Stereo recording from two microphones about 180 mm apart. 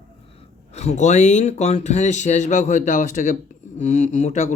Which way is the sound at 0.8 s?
40° left (ahead or behind).